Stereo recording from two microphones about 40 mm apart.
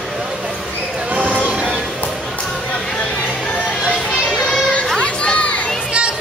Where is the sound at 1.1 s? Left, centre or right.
Right.